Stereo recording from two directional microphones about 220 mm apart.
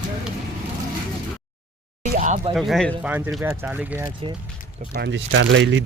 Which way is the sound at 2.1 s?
35° right (ahead or behind).